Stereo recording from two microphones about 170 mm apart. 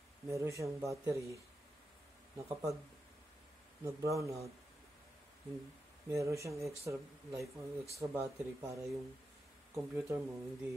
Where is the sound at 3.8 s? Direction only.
20° right (ahead or behind).